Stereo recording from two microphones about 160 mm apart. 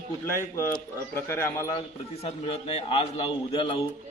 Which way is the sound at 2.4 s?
40° left (ahead or behind).